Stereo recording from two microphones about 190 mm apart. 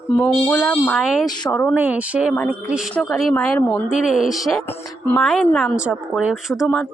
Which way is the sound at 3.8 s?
5° right (ahead or behind).